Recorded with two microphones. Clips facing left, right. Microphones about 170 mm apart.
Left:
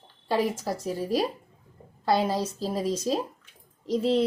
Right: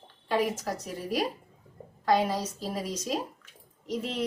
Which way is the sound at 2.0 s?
30° left (ahead or behind).